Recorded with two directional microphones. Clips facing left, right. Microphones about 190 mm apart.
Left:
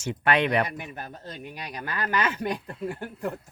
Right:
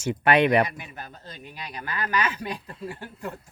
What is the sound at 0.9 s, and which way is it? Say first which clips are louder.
Speech: left 3 dB; 50° left (ahead or behind).